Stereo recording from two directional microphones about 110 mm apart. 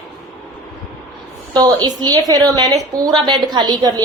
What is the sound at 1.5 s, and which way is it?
A woman's voice, 40° right (ahead or behind).